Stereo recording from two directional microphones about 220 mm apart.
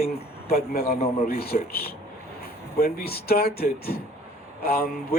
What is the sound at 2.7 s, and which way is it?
A man's voice, 45° left (ahead or behind).